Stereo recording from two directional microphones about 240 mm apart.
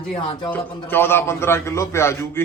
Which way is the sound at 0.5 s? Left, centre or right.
Centre.